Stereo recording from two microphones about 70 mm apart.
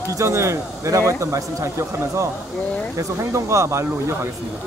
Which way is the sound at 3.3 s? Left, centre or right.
Right.